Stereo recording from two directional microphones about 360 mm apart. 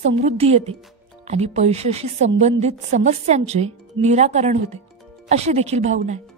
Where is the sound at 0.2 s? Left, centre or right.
Centre.